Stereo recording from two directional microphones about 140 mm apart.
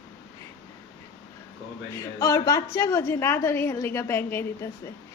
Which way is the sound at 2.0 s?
25° left (ahead or behind).